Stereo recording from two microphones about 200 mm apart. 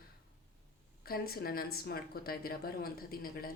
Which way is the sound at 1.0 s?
50° left (ahead or behind).